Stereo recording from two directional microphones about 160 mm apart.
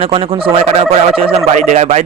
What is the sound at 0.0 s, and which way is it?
A man's voice, 35° right (ahead or behind).